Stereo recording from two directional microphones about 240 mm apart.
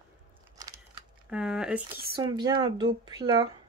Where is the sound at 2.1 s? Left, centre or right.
Centre.